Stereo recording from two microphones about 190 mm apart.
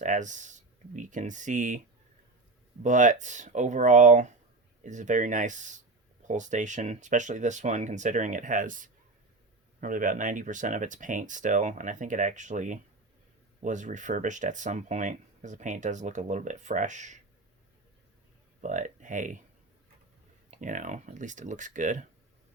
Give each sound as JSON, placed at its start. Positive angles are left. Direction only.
{"t": 0.0, "sound": "speech", "side_deg": -40}
{"t": 2.8, "sound": "speech", "side_deg": -40}
{"t": 18.6, "sound": "speech", "side_deg": -40}
{"t": 20.5, "sound": "speech", "side_deg": -40}